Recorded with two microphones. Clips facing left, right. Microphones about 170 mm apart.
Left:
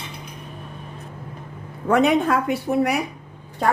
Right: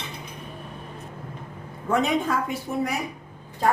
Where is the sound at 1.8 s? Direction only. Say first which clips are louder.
Left 6 dB; 65° left (ahead or behind).